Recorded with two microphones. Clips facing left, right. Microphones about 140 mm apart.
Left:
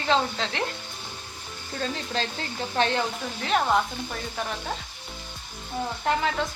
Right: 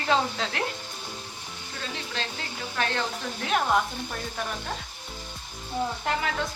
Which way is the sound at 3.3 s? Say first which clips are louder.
Left 1 dB; centre (ahead or behind).